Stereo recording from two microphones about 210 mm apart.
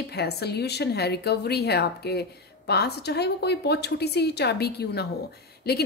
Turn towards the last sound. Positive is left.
turn(degrees=50)  # may be behind; listen again after turning